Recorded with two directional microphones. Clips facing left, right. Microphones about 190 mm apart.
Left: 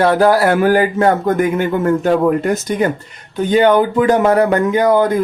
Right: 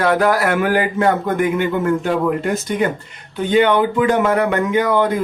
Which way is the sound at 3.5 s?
40° left (ahead or behind).